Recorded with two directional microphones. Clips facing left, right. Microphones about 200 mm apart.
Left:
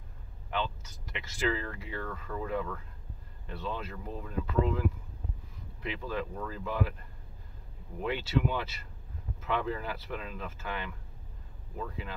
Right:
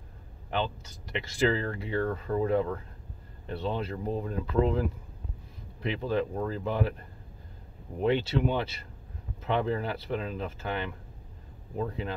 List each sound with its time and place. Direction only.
0.5 s speech: 30° right (ahead or behind)
8.0 s speech: 30° right (ahead or behind)